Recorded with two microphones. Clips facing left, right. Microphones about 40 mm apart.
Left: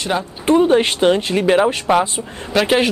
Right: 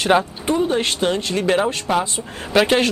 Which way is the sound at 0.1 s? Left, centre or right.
Right.